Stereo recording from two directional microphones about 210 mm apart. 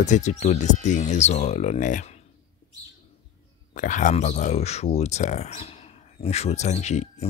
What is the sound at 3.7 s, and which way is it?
Speech, 35° left (ahead or behind).